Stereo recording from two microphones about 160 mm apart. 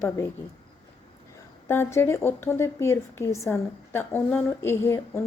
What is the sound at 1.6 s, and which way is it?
A woman's voice, 15° left (ahead or behind).